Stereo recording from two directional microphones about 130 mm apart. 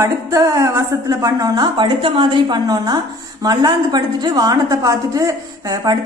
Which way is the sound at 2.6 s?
30° right (ahead or behind).